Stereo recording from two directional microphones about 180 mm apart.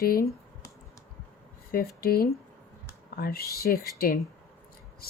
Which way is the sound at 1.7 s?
55° left (ahead or behind).